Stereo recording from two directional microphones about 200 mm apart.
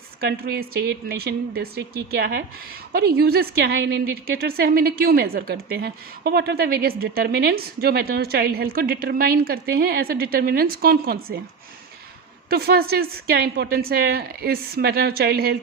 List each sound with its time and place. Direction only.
0.2 s a woman's voice: 50° right (ahead or behind)
12.5 s a woman's voice: 50° right (ahead or behind)